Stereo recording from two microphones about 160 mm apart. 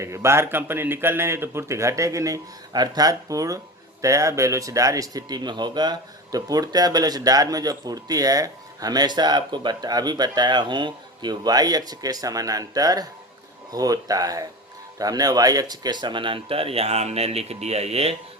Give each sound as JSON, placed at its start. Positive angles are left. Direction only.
{"t": 0.0, "sound": "a man's voice", "side_deg": -15}